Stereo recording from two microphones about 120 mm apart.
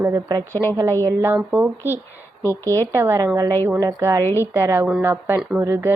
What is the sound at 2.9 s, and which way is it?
Speech, 25° right (ahead or behind).